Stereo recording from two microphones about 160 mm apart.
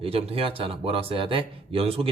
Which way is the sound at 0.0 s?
35° right (ahead or behind).